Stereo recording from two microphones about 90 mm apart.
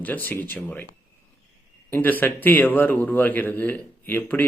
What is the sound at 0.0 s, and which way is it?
Speech, 20° left (ahead or behind).